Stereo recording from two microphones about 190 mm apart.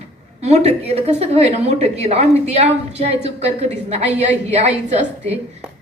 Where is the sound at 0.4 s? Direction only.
35° right (ahead or behind).